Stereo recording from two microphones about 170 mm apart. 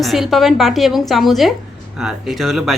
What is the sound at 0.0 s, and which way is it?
Speech, centre (ahead or behind).